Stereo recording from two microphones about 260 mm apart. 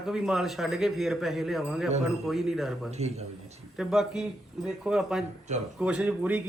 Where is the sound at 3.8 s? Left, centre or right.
Centre.